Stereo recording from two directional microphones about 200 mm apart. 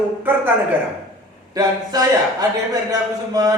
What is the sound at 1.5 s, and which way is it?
Speech, 20° right (ahead or behind).